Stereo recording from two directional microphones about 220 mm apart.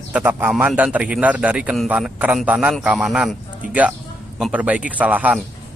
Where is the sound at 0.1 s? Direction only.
10° right (ahead or behind).